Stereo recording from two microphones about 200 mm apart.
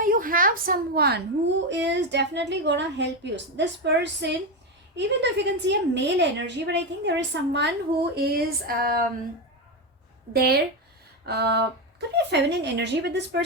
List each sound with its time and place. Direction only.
0.0 s a woman's voice: 45° right (ahead or behind); by 7.7 s 60° right (ahead or behind)
8.1 s a sound: 50° right (ahead or behind)
11.3 s a woman's voice: 55° right (ahead or behind)